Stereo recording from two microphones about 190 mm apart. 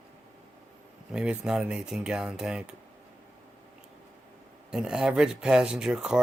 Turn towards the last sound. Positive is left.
turn(degrees=-5)  # may be behind; listen again after turning